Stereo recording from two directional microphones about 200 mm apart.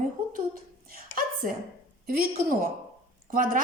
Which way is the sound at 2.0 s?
45° right (ahead or behind).